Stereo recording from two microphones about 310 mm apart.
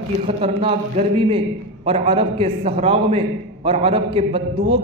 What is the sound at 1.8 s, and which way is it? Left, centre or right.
A man's voice, centre.